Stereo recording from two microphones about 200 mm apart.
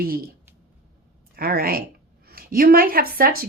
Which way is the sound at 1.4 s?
50° right (ahead or behind).